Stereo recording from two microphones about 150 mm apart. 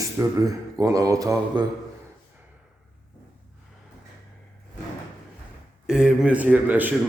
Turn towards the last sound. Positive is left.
turn(degrees=-10)  # may be behind; listen again after turning